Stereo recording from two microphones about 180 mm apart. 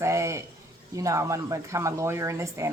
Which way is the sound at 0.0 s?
15° right (ahead or behind).